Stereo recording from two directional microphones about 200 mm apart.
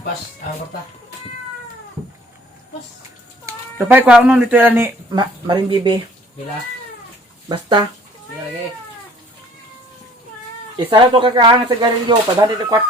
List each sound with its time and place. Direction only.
3.4 s speech: 10° right (ahead or behind)
5.1 s speech: 25° right (ahead or behind)
7.4 s speech: 25° right (ahead or behind)
10.8 s speech: 25° right (ahead or behind)